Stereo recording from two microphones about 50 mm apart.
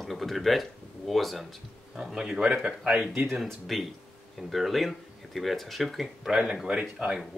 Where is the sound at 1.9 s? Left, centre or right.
Centre.